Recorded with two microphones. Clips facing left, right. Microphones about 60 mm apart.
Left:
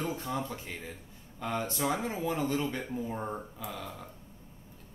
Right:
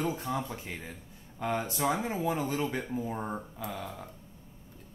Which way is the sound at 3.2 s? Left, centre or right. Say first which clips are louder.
Right 1 dB; centre.